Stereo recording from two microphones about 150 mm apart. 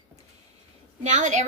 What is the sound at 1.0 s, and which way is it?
Speech, 50° right (ahead or behind).